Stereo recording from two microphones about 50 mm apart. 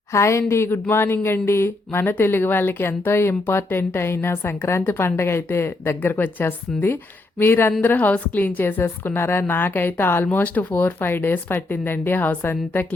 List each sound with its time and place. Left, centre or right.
0.1 s speech: left
7.8 s speech: left